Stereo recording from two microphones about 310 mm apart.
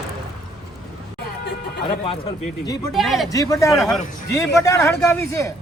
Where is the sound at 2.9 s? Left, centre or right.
Centre.